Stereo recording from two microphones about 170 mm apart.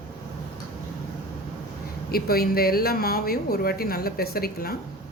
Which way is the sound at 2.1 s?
65° left (ahead or behind).